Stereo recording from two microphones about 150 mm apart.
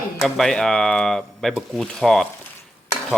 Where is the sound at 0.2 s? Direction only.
Centre (ahead or behind).